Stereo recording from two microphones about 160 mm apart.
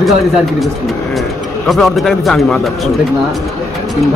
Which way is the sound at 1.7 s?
Centre (ahead or behind).